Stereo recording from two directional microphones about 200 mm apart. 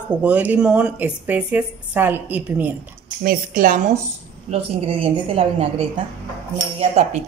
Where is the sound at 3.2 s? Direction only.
45° right (ahead or behind).